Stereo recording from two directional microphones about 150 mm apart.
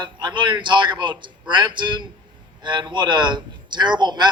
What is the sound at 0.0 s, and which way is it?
A man's voice, 30° right (ahead or behind).